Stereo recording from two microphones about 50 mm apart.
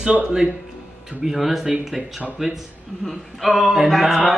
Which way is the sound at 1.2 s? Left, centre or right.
Centre.